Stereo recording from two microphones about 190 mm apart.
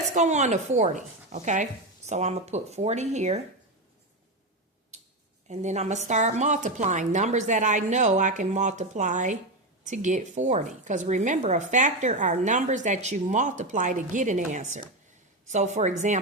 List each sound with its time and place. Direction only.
0.1 s a woman's voice: 40° right (ahead or behind)
4.9 s a sound: 35° right (ahead or behind)
5.5 s a woman's voice: 35° right (ahead or behind)